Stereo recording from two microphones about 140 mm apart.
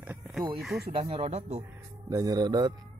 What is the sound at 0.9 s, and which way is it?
Speech, 35° right (ahead or behind).